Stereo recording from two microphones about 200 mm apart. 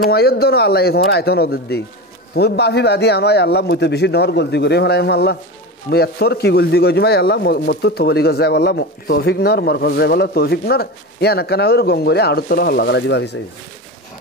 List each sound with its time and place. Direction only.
0.1 s a man's voice: 50° left (ahead or behind)